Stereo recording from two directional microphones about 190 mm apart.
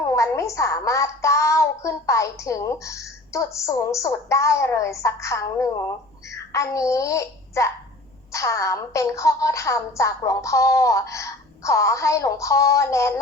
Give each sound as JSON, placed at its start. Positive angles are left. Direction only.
{"t": 0.0, "sound": "a child's voice", "side_deg": 15}